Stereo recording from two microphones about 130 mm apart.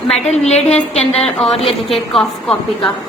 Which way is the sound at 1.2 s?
5° left (ahead or behind).